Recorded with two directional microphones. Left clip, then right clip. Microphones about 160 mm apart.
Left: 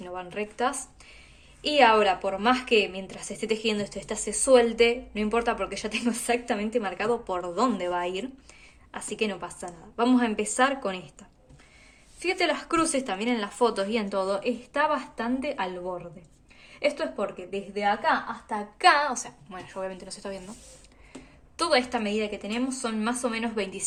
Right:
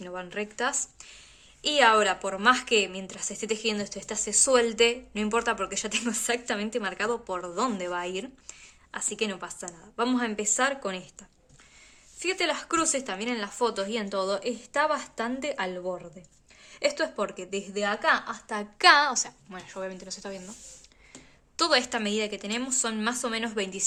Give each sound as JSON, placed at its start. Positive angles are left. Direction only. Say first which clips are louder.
{"t": 0.0, "sound": "a woman's voice", "louder": "left 1 dB", "side_deg": -30}